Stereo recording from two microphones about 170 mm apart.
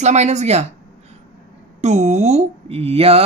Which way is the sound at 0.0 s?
40° right (ahead or behind).